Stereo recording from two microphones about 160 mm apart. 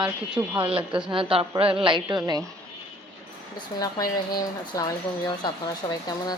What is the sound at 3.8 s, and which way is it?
Speech, 25° left (ahead or behind).